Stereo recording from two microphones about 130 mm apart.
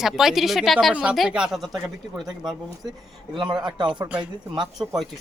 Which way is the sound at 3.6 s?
35° right (ahead or behind).